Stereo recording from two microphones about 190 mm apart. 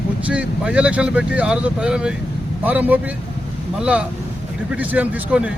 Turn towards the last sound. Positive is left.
turn(degrees=-5)  # may be behind; listen again after turning